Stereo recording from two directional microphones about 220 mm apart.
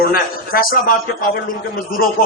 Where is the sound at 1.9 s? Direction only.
40° left (ahead or behind).